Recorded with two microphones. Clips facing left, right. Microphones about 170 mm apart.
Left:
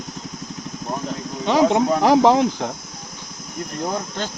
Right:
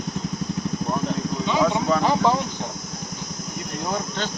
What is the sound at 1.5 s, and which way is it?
Speech, 75° left (ahead or behind).